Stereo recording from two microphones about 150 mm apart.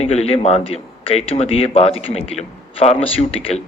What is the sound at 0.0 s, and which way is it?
Speech, 40° left (ahead or behind).